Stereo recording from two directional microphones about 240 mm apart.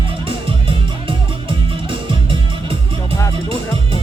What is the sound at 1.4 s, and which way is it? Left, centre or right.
Music, right.